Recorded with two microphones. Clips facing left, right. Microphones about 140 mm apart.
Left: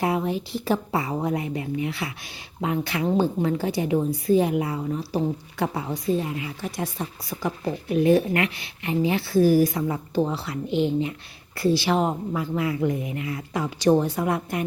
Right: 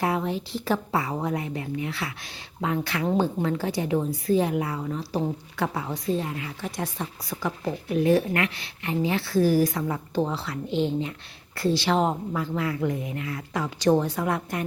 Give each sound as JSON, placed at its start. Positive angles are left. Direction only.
{"t": 0.0, "sound": "a woman's voice", "side_deg": 15}
{"t": 5.9, "sound": "a woman's voice", "side_deg": 10}